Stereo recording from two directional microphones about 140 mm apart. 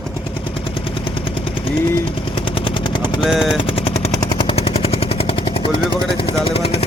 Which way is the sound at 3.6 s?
40° left (ahead or behind).